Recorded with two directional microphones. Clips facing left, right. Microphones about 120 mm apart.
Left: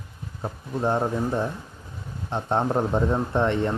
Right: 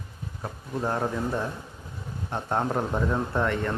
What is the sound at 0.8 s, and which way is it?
Speech, 25° left (ahead or behind).